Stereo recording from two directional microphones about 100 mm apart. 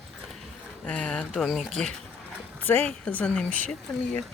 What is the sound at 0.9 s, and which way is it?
Speech, 10° left (ahead or behind).